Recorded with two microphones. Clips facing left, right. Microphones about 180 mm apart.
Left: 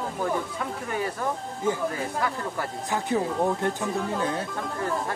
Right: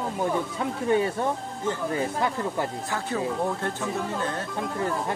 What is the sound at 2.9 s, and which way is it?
Speech, 15° left (ahead or behind).